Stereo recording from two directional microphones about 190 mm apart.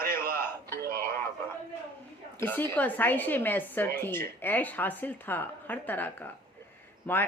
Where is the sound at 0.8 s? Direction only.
50° right (ahead or behind).